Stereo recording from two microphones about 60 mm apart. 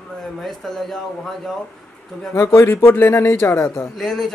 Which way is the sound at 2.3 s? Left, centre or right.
Left.